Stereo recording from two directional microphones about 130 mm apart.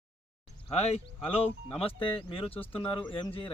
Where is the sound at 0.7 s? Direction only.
50° left (ahead or behind).